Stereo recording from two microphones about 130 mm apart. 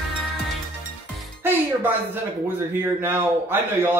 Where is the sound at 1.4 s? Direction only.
15° right (ahead or behind).